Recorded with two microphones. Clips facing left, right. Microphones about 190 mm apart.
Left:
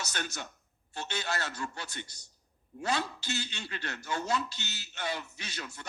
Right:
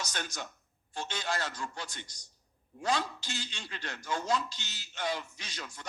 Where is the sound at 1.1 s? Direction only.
65° left (ahead or behind).